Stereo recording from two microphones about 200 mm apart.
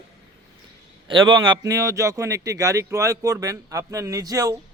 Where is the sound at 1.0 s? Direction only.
25° right (ahead or behind).